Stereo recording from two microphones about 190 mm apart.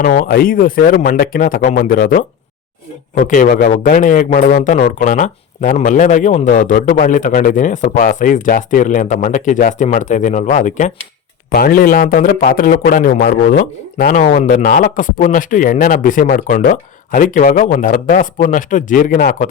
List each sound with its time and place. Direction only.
0.0 s a man's voice: 45° left (ahead or behind)